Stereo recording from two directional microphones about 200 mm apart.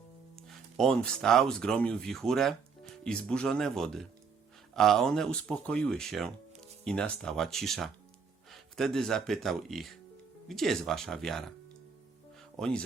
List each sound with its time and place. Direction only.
0.3 s speech: centre (ahead or behind)
12.5 s speech: 5° left (ahead or behind)